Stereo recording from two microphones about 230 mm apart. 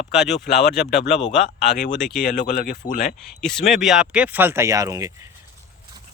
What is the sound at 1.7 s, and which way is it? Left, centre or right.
Speech, left.